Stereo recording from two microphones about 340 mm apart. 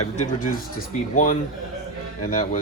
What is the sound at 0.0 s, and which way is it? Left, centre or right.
Speech, left.